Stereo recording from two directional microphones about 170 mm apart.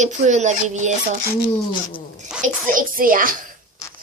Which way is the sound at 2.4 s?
50° right (ahead or behind).